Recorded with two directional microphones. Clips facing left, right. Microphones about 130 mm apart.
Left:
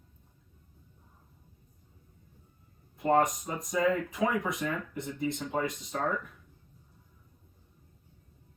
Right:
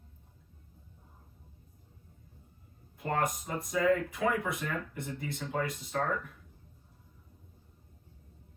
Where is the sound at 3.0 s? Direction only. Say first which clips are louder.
Left 6 dB; 20° left (ahead or behind).